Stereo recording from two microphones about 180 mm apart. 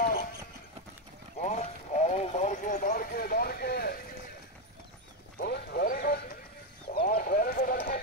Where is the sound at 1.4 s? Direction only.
40° left (ahead or behind); by 4.0 s 60° left (ahead or behind).